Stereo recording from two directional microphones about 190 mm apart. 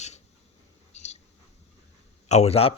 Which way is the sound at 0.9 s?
35° left (ahead or behind).